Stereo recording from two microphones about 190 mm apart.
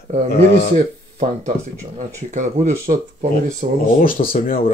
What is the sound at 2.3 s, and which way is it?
Speech, 40° right (ahead or behind).